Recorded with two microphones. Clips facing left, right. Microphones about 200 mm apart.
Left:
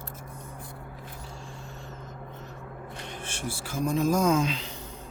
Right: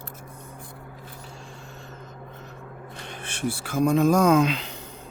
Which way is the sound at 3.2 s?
65° right (ahead or behind).